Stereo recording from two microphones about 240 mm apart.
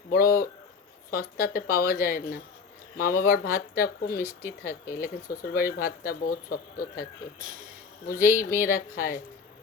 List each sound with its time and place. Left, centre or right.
0.1 s speech: left
7.3 s speech: right
8.0 s speech: left